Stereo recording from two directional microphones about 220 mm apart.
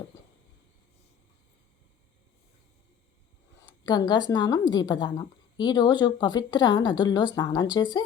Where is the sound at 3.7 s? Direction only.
20° left (ahead or behind).